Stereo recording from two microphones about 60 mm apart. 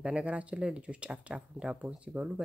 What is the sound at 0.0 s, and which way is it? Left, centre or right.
Speech, right.